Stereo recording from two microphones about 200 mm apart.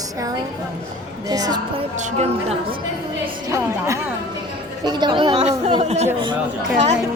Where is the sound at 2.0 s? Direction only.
30° right (ahead or behind).